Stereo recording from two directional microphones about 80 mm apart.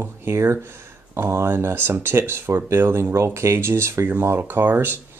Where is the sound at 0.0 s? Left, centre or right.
Right.